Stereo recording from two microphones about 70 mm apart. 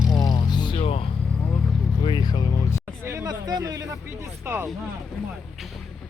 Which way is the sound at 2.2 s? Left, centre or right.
Left.